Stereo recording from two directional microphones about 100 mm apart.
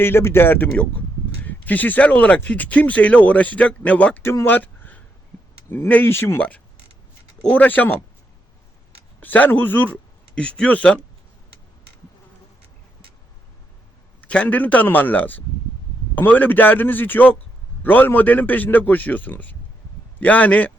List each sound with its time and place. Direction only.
0.0 s a man's voice: 25° left (ahead or behind)
4.2 s a man's voice: 25° left (ahead or behind)
9.2 s speech: 15° left (ahead or behind)
14.2 s a man's voice: 15° left (ahead or behind)